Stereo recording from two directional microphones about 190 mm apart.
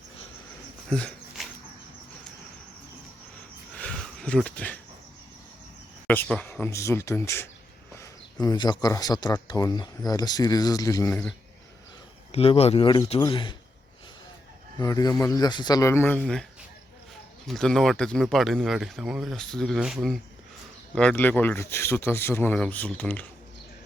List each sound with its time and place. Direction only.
0.9 s dog: 5° left (ahead or behind)
3.8 s a sound: 5° left (ahead or behind)
6.1 s speech: 5° left (ahead or behind)
12.3 s speech: 30° left (ahead or behind)
14.8 s speech: 20° left (ahead or behind); by 16.5 s 5° left (ahead or behind)
17.5 s speech: centre (ahead or behind)